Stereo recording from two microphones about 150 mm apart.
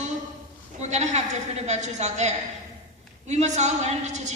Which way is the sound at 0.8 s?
50° right (ahead or behind).